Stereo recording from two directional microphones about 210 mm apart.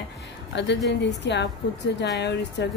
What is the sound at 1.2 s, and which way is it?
A woman's voice, 55° left (ahead or behind).